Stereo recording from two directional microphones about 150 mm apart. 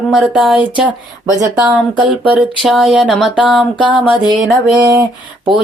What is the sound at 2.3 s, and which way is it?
Speech, 5° right (ahead or behind).